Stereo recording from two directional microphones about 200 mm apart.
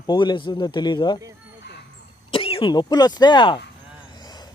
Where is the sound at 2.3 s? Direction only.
30° left (ahead or behind).